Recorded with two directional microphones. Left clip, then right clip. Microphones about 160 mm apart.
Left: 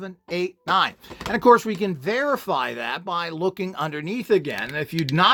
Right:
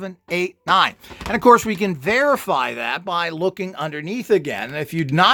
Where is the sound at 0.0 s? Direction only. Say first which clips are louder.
Right 4 dB; 15° right (ahead or behind).